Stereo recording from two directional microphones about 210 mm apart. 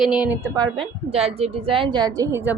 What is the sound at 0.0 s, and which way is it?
A woman's voice, 5° right (ahead or behind).